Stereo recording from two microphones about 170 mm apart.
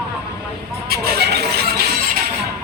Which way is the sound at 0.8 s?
65° right (ahead or behind).